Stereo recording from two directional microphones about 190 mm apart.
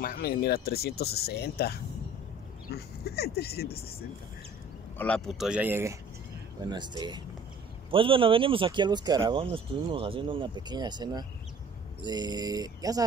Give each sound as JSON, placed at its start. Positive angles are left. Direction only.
{"t": 0.0, "sound": "speech", "side_deg": 50}
{"t": 4.9, "sound": "speech", "side_deg": 5}
{"t": 6.6, "sound": "speech", "side_deg": -25}